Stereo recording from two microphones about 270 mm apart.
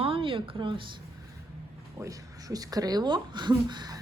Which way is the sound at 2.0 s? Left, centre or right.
Centre.